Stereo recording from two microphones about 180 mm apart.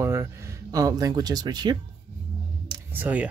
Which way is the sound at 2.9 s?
10° right (ahead or behind).